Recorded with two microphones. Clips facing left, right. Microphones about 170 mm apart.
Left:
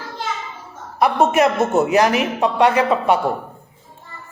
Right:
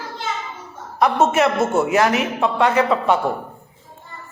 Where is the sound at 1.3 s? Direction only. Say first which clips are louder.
Left 2 dB; 15° left (ahead or behind).